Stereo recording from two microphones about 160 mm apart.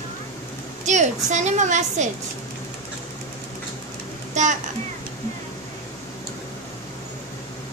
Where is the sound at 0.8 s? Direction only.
50° right (ahead or behind).